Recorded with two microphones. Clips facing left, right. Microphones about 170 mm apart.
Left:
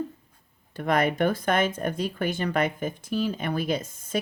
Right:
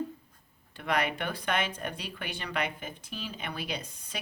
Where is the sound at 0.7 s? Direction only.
45° left (ahead or behind).